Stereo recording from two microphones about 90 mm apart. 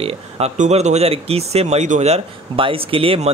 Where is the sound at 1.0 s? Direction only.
90° right.